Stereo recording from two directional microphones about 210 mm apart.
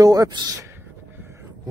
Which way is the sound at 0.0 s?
15° right (ahead or behind).